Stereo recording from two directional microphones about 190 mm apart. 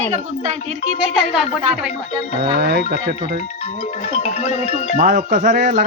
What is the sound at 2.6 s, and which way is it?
Speech, 55° right (ahead or behind).